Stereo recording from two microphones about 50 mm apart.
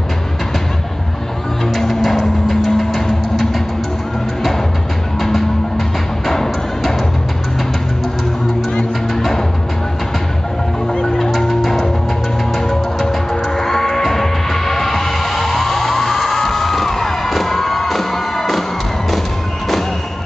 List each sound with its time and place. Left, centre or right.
1.8 s music: centre
6.2 s music: centre
11.1 s music: centre